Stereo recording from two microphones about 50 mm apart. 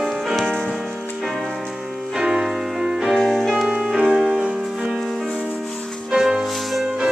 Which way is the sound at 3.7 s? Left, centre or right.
Centre.